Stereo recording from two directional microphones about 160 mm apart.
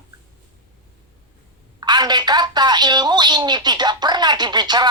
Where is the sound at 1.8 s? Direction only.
25° right (ahead or behind).